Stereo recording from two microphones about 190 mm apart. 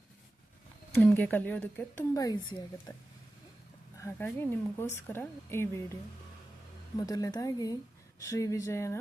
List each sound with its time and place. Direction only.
0.9 s a woman's voice: 10° left (ahead or behind); by 2.9 s 25° left (ahead or behind)
4.0 s a woman's voice: 10° left (ahead or behind)